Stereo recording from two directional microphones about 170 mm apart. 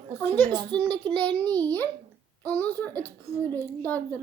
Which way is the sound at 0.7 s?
5° left (ahead or behind).